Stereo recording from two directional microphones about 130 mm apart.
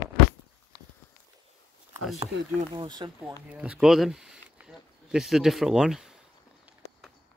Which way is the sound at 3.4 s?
10° right (ahead or behind).